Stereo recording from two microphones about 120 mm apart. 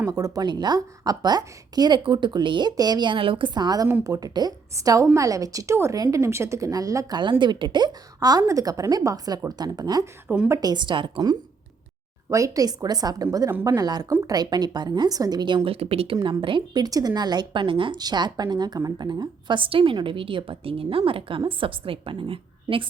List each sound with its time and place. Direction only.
0.1 s a woman's voice: 35° right (ahead or behind)
10.2 s a woman's voice: 10° right (ahead or behind)
10.5 s a woman's voice: 35° right (ahead or behind)
12.3 s a woman's voice: 30° right (ahead or behind); by 16.1 s 55° right (ahead or behind)
16.4 s a woman's voice: 45° right (ahead or behind)